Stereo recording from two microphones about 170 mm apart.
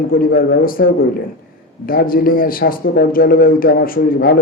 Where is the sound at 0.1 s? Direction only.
60° left (ahead or behind).